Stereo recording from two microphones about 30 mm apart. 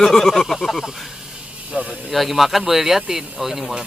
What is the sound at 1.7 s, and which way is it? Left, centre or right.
Speech, right.